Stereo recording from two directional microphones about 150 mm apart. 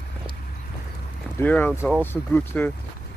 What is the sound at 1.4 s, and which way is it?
Speech, 10° left (ahead or behind).